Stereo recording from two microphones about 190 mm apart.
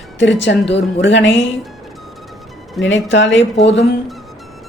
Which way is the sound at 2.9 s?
75° left (ahead or behind).